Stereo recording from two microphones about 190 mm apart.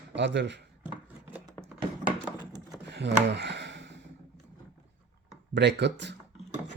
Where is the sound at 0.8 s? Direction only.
5° right (ahead or behind).